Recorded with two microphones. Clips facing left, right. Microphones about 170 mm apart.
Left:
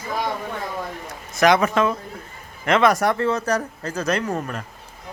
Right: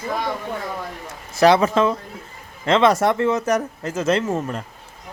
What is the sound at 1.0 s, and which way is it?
Speech, 30° right (ahead or behind).